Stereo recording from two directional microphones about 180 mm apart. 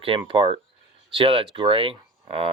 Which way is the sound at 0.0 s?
30° right (ahead or behind).